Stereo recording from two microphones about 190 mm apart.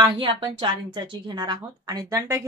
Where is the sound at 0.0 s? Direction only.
25° right (ahead or behind).